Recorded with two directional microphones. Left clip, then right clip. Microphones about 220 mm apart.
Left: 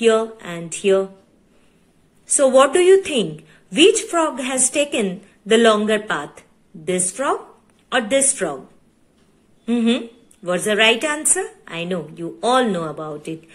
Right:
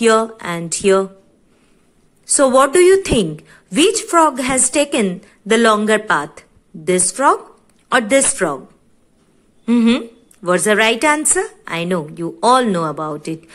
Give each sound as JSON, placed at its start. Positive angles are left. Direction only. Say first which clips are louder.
{"t": 0.0, "sound": "a woman's voice", "louder": "right 3 dB", "side_deg": -25}
{"t": 2.3, "sound": "a woman's voice", "louder": "right 2 dB", "side_deg": -25}
{"t": 9.7, "sound": "a woman's voice", "louder": "right 4 dB", "side_deg": -20}